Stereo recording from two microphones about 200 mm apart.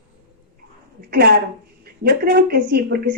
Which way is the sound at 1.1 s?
50° right (ahead or behind).